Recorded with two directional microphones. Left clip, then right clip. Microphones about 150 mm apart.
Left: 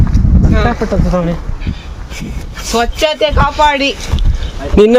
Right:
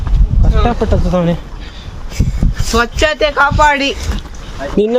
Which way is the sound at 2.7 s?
80° right.